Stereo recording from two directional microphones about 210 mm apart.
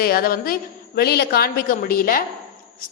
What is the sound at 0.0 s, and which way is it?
A woman's voice, 45° left (ahead or behind).